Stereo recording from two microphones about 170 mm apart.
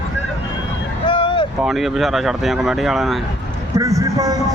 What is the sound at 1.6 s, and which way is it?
Speech, centre (ahead or behind).